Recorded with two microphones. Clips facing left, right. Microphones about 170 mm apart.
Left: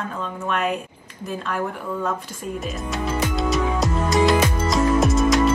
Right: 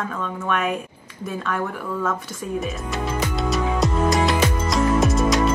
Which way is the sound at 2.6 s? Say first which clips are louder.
Even; centre (ahead or behind).